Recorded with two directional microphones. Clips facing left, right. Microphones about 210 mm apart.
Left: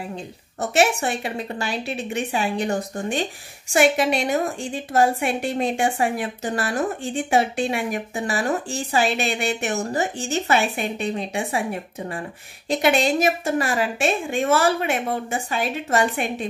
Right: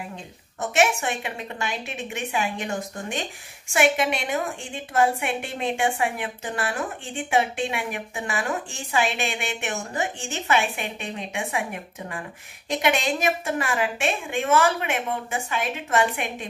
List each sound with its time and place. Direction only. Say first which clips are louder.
0.1 s a woman's voice: left 6 dB; 35° left (ahead or behind)